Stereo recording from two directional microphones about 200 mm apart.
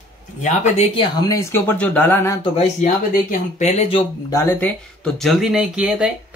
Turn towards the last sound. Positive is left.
turn(degrees=-5)  # may be behind; listen again after turning